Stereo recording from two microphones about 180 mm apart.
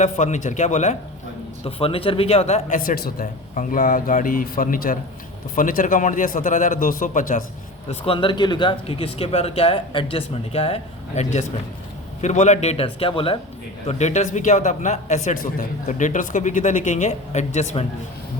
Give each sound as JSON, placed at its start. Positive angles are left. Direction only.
{"t": 0.0, "sound": "speech", "side_deg": 40}
{"t": 7.9, "sound": "speech", "side_deg": 30}